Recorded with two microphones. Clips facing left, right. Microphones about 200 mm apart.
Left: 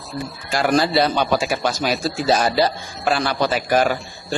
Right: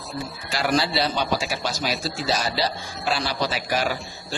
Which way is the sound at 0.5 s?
50° left (ahead or behind).